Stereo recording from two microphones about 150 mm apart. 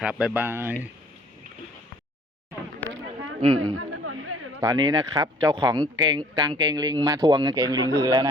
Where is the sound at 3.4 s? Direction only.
35° right (ahead or behind).